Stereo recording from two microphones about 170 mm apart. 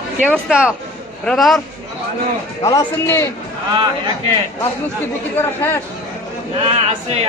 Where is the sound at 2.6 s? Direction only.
20° left (ahead or behind).